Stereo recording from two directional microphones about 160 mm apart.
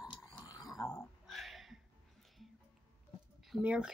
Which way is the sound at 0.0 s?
25° left (ahead or behind).